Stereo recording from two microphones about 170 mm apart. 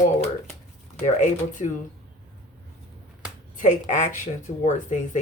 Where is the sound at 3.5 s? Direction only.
45° left (ahead or behind).